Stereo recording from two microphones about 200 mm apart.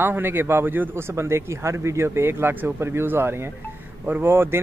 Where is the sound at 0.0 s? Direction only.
10° right (ahead or behind).